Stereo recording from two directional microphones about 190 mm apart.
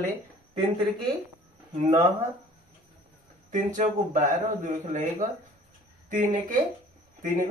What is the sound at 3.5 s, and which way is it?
Speech, 45° right (ahead or behind).